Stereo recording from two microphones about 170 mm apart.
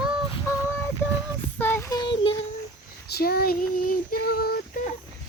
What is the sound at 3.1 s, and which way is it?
Child singing, 70° left (ahead or behind).